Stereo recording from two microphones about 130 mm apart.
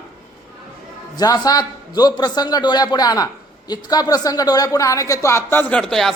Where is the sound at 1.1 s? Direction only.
30° left (ahead or behind).